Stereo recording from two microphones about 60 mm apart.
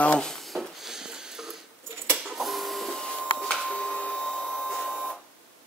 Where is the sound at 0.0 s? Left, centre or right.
Left.